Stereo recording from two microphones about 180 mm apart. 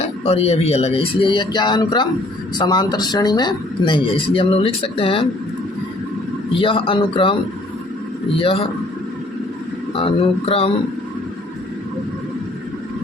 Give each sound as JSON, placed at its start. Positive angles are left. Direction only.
{"t": 0.3, "sound": "speech", "side_deg": 35}
{"t": 6.5, "sound": "speech", "side_deg": 30}
{"t": 8.4, "sound": "speech", "side_deg": 30}
{"t": 10.0, "sound": "speech", "side_deg": 30}